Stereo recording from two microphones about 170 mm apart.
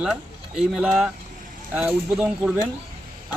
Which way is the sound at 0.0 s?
Centre (ahead or behind).